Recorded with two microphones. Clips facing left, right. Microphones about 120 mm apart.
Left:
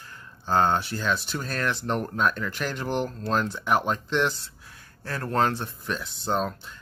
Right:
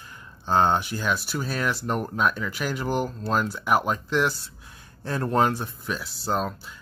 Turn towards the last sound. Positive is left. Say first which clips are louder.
# even
turn(degrees=-5)  # may be behind; listen again after turning